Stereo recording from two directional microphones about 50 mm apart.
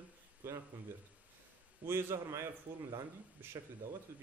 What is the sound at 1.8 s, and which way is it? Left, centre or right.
Speech, right.